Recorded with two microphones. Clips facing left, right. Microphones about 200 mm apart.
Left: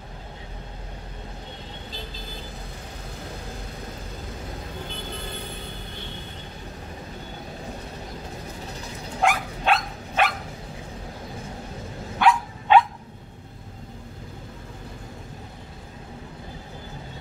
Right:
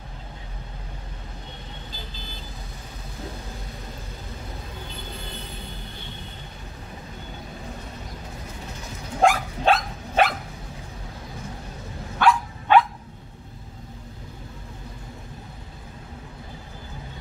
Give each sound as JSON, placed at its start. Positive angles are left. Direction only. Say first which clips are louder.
{"t": 9.2, "sound": "dog", "louder": "right 4 dB", "side_deg": -35}
{"t": 12.2, "sound": "dog", "louder": "even", "side_deg": 20}